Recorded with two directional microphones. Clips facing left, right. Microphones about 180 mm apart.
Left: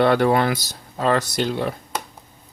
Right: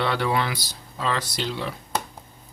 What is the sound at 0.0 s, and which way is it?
Speech, 50° left (ahead or behind).